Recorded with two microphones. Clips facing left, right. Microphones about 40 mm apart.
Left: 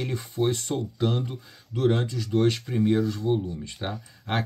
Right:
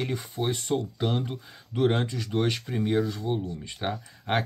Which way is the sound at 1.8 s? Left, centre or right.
Right.